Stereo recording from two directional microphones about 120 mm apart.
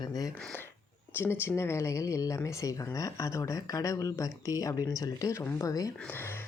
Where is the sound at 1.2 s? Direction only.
20° left (ahead or behind).